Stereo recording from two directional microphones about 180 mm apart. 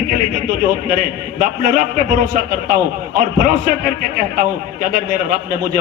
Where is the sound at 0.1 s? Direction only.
50° right (ahead or behind).